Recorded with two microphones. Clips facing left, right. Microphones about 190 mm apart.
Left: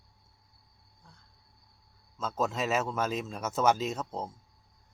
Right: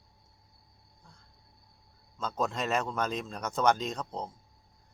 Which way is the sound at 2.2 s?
5° left (ahead or behind).